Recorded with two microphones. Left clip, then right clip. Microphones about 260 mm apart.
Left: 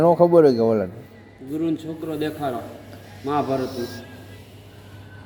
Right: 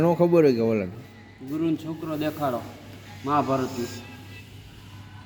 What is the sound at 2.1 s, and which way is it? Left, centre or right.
A man's voice, centre.